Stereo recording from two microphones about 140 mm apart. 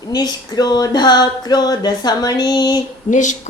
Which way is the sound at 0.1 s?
30° left (ahead or behind).